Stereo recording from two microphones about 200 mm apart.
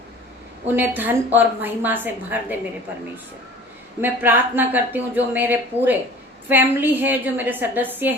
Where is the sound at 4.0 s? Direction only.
10° right (ahead or behind).